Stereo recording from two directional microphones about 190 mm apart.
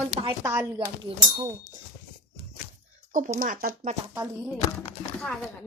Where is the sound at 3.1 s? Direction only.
45° right (ahead or behind).